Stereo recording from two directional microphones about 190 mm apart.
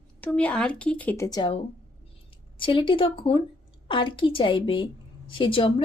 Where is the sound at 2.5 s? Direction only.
25° left (ahead or behind).